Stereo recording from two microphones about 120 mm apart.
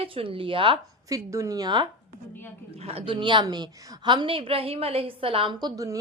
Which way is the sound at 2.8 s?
50° right (ahead or behind).